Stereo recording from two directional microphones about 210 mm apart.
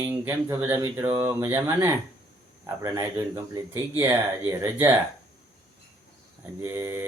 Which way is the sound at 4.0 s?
15° right (ahead or behind).